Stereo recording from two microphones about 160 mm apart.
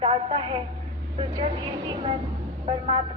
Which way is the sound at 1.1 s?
30° right (ahead or behind).